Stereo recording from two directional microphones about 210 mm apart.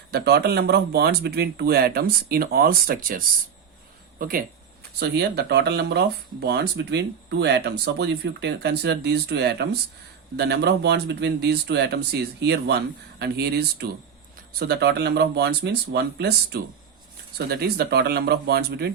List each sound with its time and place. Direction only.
0.1 s speech: 50° right (ahead or behind)